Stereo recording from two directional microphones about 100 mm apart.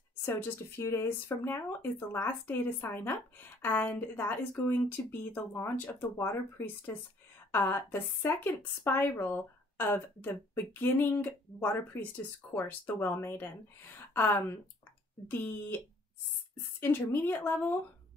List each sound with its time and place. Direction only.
0.2 s a woman's voice: 20° left (ahead or behind)
16.8 s a woman's voice: 20° left (ahead or behind)